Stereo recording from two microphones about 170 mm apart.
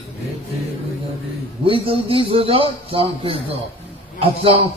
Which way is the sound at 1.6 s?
30° right (ahead or behind).